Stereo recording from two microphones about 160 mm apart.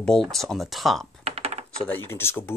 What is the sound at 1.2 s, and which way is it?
Typing, 40° right (ahead or behind).